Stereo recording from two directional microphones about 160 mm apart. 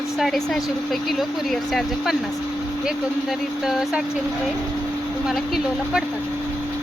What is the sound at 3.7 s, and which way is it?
Speech, 5° right (ahead or behind).